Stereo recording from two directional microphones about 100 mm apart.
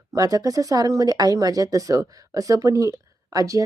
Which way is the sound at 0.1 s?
40° right (ahead or behind).